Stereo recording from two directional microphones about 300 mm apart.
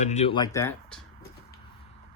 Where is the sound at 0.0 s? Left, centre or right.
Left.